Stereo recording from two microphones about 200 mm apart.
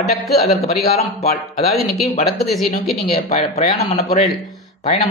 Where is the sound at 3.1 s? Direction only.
30° left (ahead or behind).